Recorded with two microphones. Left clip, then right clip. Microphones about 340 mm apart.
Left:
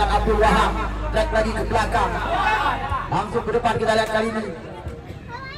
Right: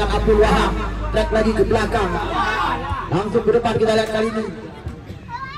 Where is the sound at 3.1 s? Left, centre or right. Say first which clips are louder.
Right 7 dB; left.